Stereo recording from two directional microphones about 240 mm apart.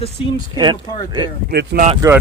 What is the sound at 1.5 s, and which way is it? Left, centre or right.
Speech, right.